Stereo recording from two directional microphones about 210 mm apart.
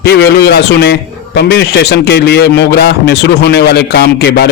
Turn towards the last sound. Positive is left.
turn(degrees=50)  # may be behind; listen again after turning